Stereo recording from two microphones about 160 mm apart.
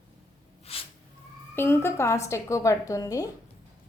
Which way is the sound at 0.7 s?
40° left (ahead or behind).